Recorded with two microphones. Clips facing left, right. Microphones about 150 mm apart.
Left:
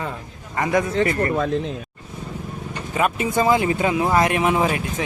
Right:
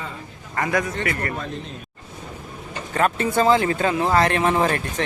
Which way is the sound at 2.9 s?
10° left (ahead or behind).